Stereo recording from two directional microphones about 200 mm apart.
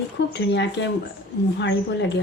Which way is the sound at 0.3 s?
60° left (ahead or behind).